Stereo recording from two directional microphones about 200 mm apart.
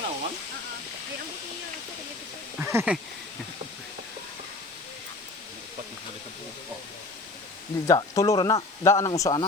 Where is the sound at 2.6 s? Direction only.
10° right (ahead or behind).